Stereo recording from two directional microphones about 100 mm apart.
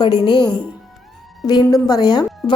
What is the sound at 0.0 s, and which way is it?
Speech, 50° left (ahead or behind).